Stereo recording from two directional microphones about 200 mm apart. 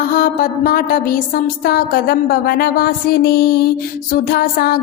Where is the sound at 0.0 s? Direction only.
45° left (ahead or behind).